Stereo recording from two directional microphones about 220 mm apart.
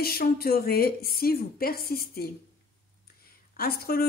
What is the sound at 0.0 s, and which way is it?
Speech, 45° left (ahead or behind).